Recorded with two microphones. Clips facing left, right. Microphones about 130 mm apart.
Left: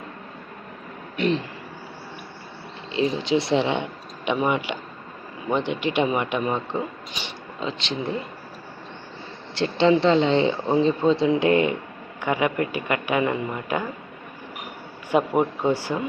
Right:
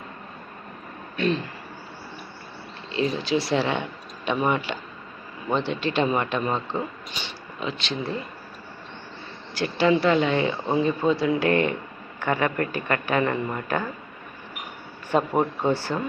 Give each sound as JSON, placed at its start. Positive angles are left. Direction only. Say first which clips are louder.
{"t": 1.1, "sound": "vehicle", "louder": "left 1 dB", "side_deg": 20}
{"t": 2.9, "sound": "speech", "louder": "left 2 dB", "side_deg": 20}
{"t": 9.6, "sound": "speech", "louder": "left 2 dB", "side_deg": 25}
{"t": 15.1, "sound": "speech", "louder": "left 2 dB", "side_deg": 10}